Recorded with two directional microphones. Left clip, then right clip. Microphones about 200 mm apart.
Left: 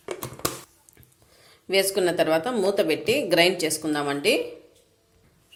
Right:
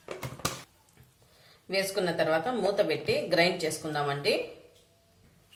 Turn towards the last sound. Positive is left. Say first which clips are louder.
# left 5 dB
turn(degrees=45)  # may be behind; listen again after turning